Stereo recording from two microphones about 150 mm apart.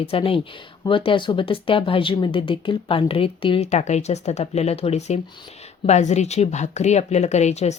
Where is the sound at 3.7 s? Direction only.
50° left (ahead or behind).